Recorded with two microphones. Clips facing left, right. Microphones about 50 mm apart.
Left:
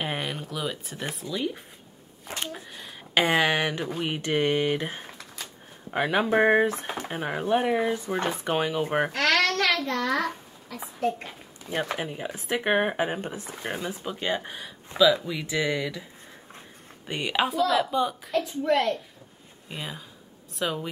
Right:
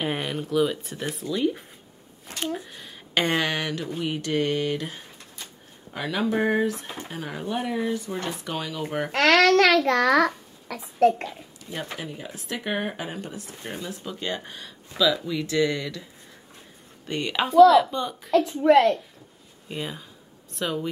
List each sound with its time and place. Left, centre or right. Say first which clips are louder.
0.0 s speech: right 3 dB; centre; by 9.1 s left
9.5 s a child's voice: right 7 dB; right
12.0 s speech: left 3 dB; left; by 18.4 s centre
18.4 s a woman's voice: right 6 dB; right
19.7 s speech: right 4 dB; centre